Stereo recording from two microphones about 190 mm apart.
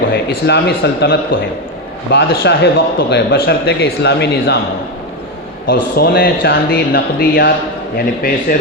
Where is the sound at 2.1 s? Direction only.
70° left (ahead or behind).